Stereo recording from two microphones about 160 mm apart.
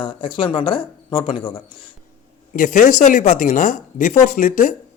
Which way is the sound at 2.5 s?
55° left (ahead or behind).